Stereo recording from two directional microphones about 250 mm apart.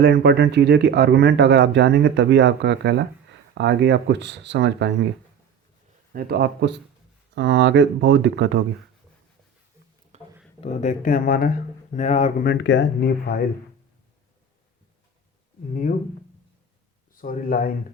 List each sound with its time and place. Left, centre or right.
0.0 s speech: right
6.1 s speech: right
10.1 s a sound: right
10.6 s speech: left
12.5 s speech: left
17.2 s speech: left